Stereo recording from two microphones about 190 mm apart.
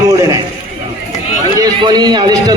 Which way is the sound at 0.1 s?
15° right (ahead or behind).